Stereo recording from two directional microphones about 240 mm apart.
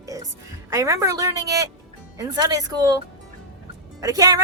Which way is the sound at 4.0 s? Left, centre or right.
Centre.